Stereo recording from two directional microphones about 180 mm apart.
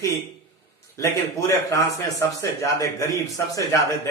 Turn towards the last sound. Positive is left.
turn(degrees=15)  # may be behind; listen again after turning